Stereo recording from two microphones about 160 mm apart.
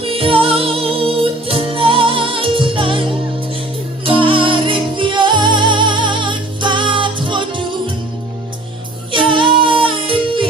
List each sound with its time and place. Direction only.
0.0 s music: 35° right (ahead or behind)
9.1 s music: 30° right (ahead or behind)